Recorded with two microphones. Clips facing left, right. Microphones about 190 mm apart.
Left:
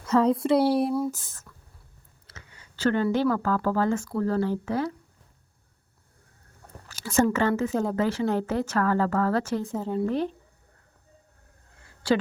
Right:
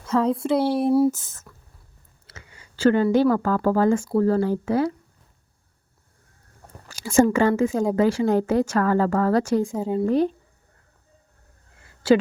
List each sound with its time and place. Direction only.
0.1 s speech: centre (ahead or behind)
0.9 s speech: 30° right (ahead or behind)
2.2 s a woman's voice: 10° right (ahead or behind)
4.0 s speech: 30° right (ahead or behind)
4.3 s a woman's voice: 10° right (ahead or behind)
6.9 s a woman's voice: 10° right (ahead or behind)